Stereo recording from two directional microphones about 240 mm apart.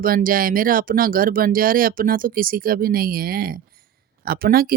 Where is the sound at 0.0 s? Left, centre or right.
Right.